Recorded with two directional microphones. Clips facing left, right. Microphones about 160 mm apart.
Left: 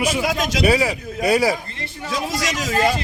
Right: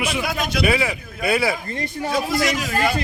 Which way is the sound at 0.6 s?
40° left (ahead or behind).